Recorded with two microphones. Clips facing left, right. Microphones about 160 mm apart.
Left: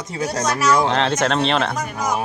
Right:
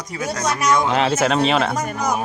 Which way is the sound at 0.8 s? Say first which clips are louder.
Right 1 dB; 5° right (ahead or behind).